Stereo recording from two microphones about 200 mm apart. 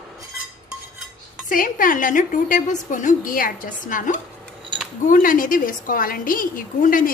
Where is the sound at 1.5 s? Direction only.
45° left (ahead or behind).